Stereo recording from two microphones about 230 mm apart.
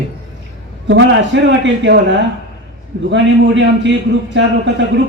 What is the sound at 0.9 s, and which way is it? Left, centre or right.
A man's voice, right.